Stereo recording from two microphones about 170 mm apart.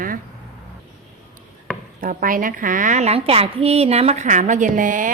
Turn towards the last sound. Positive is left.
turn(degrees=-50)  # may be behind; listen again after turning